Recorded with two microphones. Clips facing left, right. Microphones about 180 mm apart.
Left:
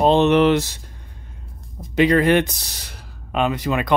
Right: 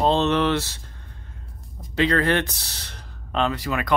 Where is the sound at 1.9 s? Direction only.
15° left (ahead or behind).